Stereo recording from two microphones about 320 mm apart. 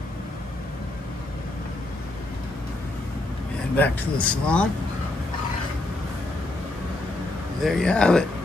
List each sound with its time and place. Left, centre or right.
3.7 s speech: centre
7.6 s speech: centre